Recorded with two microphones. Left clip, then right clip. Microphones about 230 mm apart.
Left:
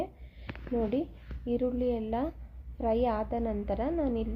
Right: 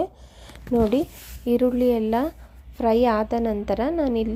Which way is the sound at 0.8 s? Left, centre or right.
Right.